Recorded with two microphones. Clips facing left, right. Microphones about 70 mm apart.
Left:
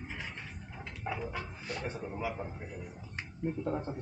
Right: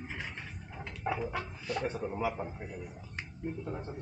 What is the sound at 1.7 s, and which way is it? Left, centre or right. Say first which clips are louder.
Speech: right 5 dB; centre.